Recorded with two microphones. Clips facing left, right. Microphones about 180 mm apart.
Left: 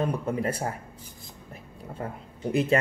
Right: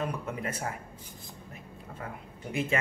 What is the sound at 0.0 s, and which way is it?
Speech, 35° left (ahead or behind).